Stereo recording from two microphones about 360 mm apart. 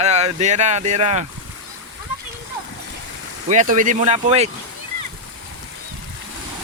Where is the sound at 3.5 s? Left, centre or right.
Right.